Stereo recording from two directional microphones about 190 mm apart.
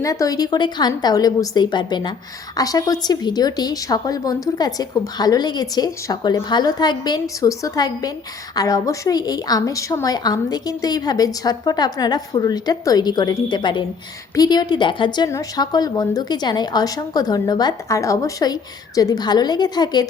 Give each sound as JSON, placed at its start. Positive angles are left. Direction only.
{"t": 0.0, "sound": "a woman's voice", "side_deg": 15}